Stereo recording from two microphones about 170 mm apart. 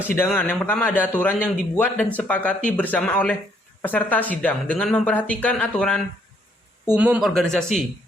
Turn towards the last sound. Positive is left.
turn(degrees=0)  # may be behind; listen again after turning